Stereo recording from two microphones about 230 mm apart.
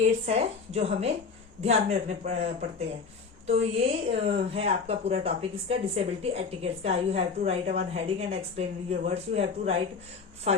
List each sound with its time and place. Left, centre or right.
0.0 s a woman's voice: right